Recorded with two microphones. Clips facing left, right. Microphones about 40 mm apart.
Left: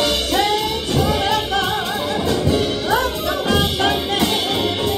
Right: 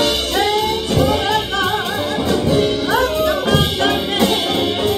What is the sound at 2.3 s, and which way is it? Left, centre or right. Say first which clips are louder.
Music: right 4 dB; centre.